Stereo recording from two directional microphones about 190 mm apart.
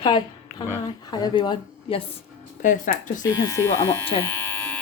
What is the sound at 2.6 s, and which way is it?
Speech, 45° left (ahead or behind).